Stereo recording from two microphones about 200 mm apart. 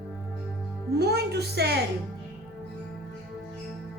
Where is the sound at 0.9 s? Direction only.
55° right (ahead or behind).